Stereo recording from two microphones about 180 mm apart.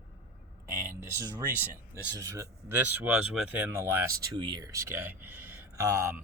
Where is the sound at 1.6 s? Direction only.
15° right (ahead or behind).